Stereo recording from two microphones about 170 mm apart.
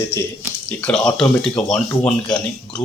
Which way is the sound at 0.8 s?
5° left (ahead or behind).